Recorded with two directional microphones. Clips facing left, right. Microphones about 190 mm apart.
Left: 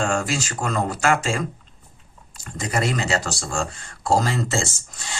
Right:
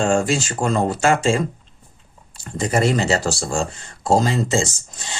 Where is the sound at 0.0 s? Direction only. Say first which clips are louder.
Right 5 dB; 25° right (ahead or behind).